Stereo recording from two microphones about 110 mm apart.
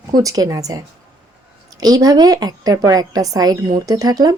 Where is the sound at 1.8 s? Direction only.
35° right (ahead or behind).